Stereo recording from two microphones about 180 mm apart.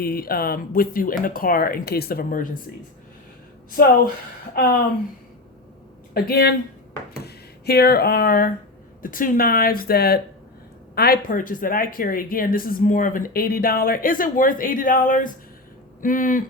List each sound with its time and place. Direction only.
0.0 s speech: 55° left (ahead or behind)
3.8 s speech: 55° left (ahead or behind)
6.1 s speech: 60° left (ahead or behind)